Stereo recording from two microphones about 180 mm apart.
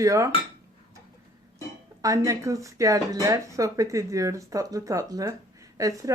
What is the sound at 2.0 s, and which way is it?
Speech, 20° right (ahead or behind).